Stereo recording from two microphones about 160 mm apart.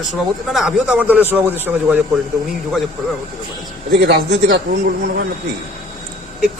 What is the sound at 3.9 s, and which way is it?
Speech, 90° right.